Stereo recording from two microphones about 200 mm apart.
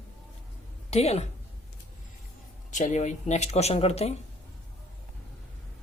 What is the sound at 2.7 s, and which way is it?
Speech, 40° left (ahead or behind).